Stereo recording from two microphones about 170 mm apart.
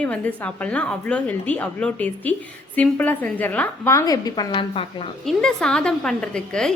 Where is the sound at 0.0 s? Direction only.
10° left (ahead or behind); by 5.0 s 30° left (ahead or behind).